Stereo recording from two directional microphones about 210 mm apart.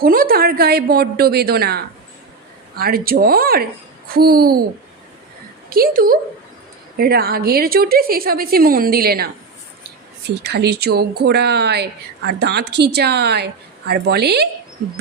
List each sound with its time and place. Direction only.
0.0 s a woman's voice: 45° right (ahead or behind)
5.7 s a woman's voice: 45° right (ahead or behind)